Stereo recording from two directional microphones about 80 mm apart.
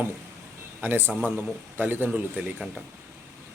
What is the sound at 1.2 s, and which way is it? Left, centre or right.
A man's voice, right.